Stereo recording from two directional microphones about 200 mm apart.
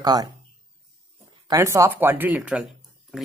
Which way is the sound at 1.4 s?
15° right (ahead or behind).